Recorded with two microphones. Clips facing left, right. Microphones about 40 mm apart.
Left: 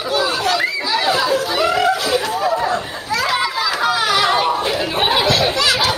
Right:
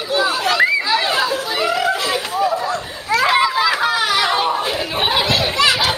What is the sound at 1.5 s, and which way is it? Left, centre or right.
Chuckle, centre.